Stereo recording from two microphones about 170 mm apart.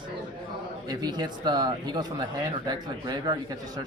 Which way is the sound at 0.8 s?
25° right (ahead or behind).